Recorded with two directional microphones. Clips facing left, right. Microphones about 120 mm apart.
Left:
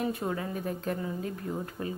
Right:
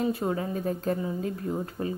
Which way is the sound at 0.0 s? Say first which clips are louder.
Right 4 dB; 25° right (ahead or behind).